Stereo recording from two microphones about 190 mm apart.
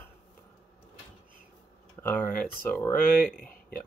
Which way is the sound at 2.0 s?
10° left (ahead or behind).